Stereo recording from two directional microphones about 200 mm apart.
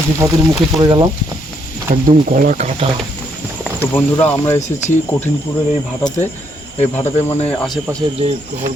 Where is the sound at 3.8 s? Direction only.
10° left (ahead or behind).